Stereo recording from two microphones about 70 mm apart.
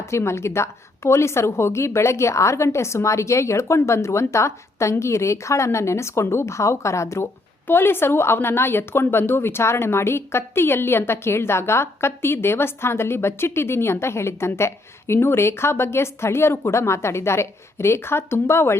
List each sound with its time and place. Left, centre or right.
0.0 s a woman's voice: left
7.7 s a woman's voice: left